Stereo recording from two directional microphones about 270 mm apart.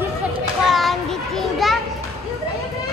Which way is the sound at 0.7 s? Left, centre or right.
Centre.